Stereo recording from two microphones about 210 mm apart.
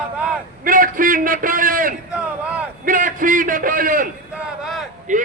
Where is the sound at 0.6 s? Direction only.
40° right (ahead or behind).